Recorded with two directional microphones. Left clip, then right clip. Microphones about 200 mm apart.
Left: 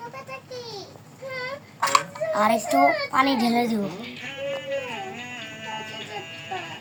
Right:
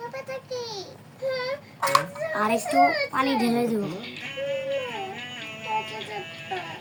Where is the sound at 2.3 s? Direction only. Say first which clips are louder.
Left 2 dB; 45° left (ahead or behind).